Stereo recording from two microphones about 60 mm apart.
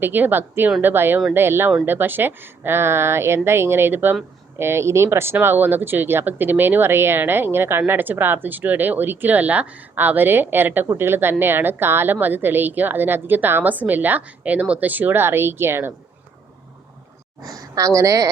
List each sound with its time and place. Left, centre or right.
0.0 s a woman's voice: right
17.4 s a woman's voice: right